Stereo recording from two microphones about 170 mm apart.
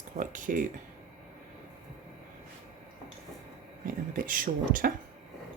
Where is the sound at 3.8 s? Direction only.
55° right (ahead or behind).